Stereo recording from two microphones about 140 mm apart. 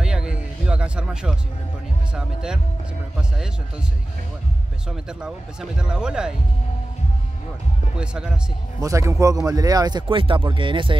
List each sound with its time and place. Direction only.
0.0 s music: 5° right (ahead or behind)
2.1 s speech: 5° right (ahead or behind)
4.8 s speech: 5° right (ahead or behind)
8.0 s speech: 5° right (ahead or behind)
8.8 s a man's voice: 20° right (ahead or behind); by 11.0 s 35° right (ahead or behind)